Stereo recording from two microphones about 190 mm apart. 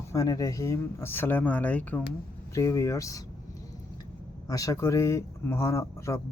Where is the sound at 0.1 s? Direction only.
20° left (ahead or behind).